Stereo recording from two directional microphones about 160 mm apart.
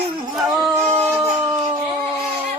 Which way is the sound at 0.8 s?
15° right (ahead or behind).